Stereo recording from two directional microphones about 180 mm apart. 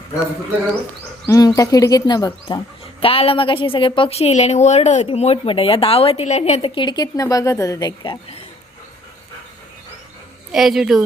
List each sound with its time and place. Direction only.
1.3 s a woman's voice: 20° left (ahead or behind)
10.5 s a woman's voice: 5° right (ahead or behind)